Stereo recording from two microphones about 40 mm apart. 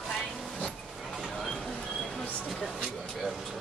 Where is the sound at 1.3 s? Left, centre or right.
Centre.